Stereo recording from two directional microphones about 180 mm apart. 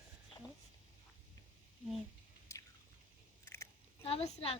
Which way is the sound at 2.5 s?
15° left (ahead or behind).